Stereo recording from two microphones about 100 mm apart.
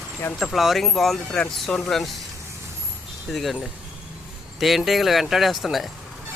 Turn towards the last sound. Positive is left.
turn(degrees=0)  # may be behind; listen again after turning